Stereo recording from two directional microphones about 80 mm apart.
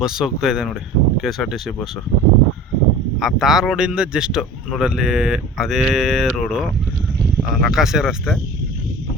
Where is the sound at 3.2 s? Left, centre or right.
Centre.